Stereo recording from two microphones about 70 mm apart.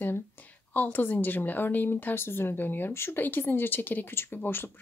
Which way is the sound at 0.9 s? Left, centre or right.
Left.